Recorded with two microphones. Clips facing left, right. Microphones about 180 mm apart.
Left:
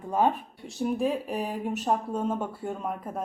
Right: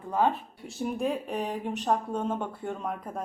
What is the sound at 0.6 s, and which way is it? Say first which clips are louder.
Speech: left 3 dB; centre (ahead or behind).